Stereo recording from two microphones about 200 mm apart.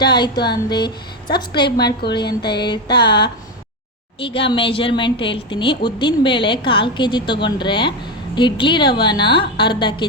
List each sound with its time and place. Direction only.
0.0 s a woman's voice: 20° left (ahead or behind)